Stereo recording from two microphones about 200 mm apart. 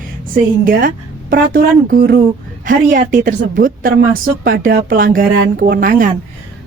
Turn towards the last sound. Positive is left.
turn(degrees=-40)  # may be behind; listen again after turning